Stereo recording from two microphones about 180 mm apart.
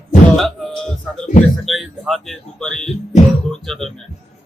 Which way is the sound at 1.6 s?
Centre (ahead or behind).